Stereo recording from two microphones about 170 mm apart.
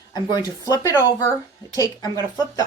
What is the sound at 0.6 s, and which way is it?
Speech, 20° left (ahead or behind).